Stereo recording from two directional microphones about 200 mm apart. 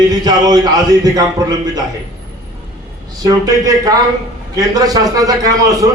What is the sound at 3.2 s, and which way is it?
A man's voice, 20° right (ahead or behind).